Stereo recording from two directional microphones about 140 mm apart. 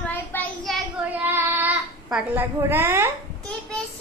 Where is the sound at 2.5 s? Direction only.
15° right (ahead or behind).